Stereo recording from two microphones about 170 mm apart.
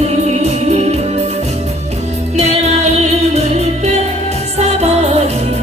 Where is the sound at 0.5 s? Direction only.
40° right (ahead or behind).